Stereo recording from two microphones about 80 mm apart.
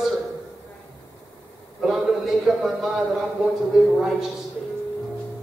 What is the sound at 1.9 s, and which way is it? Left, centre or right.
Speech, centre.